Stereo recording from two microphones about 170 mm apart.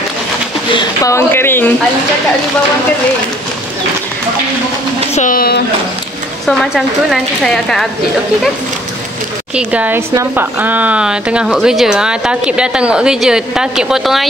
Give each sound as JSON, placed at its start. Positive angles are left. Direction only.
{"t": 0.7, "sound": "a woman's voice", "side_deg": 20}
{"t": 5.1, "sound": "speech", "side_deg": 50}
{"t": 6.4, "sound": "a woman's voice", "side_deg": 0}
{"t": 9.6, "sound": "a woman's voice", "side_deg": -10}